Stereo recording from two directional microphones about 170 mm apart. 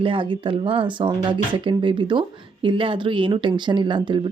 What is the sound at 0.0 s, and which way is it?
Speech, 30° right (ahead or behind).